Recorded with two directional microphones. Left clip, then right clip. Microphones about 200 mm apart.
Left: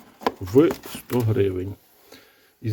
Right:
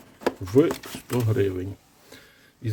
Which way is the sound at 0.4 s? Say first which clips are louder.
Left 3 dB; 15° left (ahead or behind).